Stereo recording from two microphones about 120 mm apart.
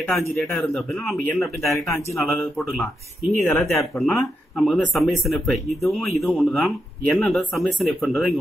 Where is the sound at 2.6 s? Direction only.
20° left (ahead or behind).